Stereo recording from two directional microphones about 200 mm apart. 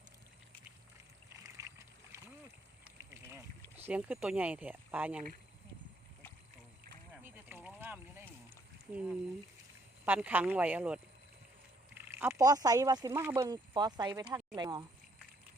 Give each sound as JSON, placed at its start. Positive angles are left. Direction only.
{"t": 1.5, "sound": "boat", "side_deg": -15}
{"t": 2.8, "sound": "a sound", "side_deg": -15}
{"t": 3.8, "sound": "speech", "side_deg": -10}
{"t": 7.2, "sound": "boat", "side_deg": -10}
{"t": 10.1, "sound": "speech", "side_deg": -10}